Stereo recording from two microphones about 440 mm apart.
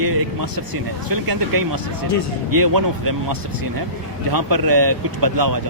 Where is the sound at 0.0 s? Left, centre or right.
Right.